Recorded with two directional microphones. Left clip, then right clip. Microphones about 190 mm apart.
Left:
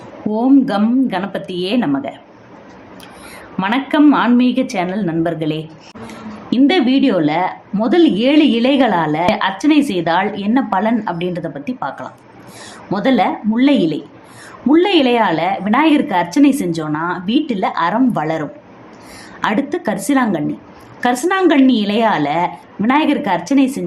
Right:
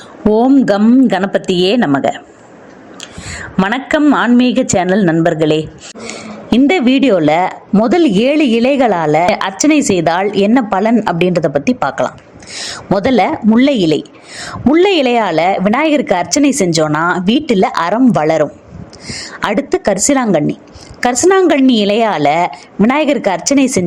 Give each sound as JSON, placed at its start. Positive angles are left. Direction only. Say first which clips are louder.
{"t": 0.3, "sound": "speech", "louder": "right 5 dB", "side_deg": -40}
{"t": 3.6, "sound": "a woman's voice", "louder": "right 1 dB", "side_deg": -40}